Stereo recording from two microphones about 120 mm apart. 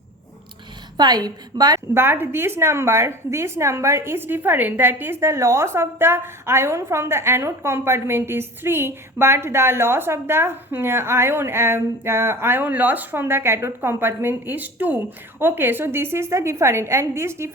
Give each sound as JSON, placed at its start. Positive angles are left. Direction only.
{"t": 0.9, "sound": "a woman's voice", "side_deg": -35}
{"t": 1.9, "sound": "a woman's voice", "side_deg": -20}